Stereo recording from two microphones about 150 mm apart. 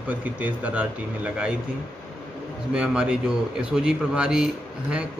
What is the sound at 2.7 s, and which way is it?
Speech, 5° right (ahead or behind).